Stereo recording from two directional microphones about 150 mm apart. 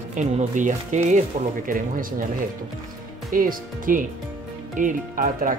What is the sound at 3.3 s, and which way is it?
Speech, 65° right (ahead or behind).